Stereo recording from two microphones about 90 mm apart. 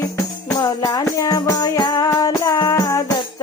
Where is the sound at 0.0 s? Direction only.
40° left (ahead or behind).